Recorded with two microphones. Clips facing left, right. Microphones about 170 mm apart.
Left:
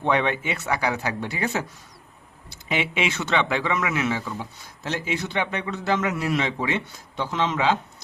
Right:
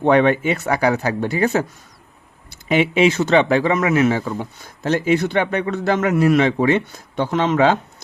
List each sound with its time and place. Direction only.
0.0 s speech: 50° right (ahead or behind)